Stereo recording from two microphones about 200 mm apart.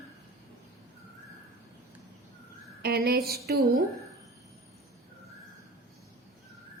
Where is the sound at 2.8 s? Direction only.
50° right (ahead or behind).